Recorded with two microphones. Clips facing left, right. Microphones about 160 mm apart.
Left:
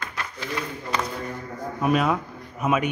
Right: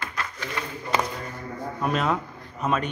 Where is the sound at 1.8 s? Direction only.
5° left (ahead or behind).